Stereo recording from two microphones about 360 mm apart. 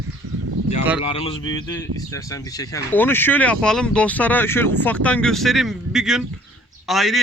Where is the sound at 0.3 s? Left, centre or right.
Right.